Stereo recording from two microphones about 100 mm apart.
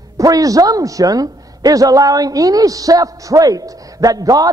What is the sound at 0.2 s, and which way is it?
A man's voice, 35° right (ahead or behind).